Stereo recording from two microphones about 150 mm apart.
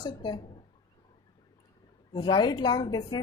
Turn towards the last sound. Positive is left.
turn(degrees=30)  # may be behind; listen again after turning